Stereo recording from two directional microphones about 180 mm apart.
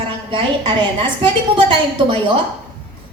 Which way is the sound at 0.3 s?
25° right (ahead or behind).